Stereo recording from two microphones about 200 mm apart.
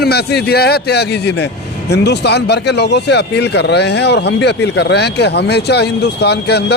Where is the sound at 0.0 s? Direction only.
55° left (ahead or behind).